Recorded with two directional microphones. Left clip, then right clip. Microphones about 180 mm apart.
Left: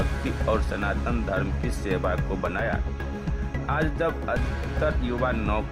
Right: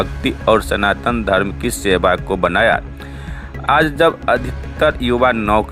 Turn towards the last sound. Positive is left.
turn(degrees=-35)  # may be behind; listen again after turning